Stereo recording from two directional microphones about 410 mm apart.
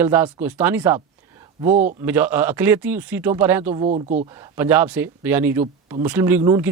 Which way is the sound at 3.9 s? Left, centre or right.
Centre.